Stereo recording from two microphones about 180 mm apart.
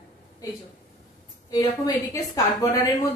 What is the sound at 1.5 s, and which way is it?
A woman's voice, 20° left (ahead or behind).